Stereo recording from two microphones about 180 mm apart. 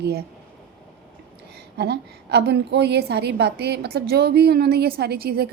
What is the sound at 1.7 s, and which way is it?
A woman's voice, 65° right (ahead or behind).